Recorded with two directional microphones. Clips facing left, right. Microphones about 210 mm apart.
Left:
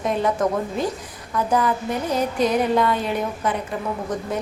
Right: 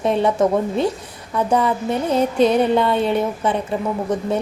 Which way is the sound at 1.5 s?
25° right (ahead or behind).